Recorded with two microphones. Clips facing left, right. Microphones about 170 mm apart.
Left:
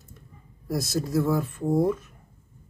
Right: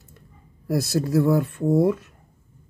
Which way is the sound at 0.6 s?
65° right (ahead or behind).